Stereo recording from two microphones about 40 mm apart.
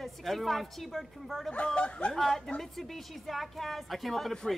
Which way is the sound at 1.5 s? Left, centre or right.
Left.